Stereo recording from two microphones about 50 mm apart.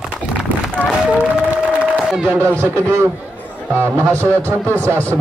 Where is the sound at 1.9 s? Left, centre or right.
Centre.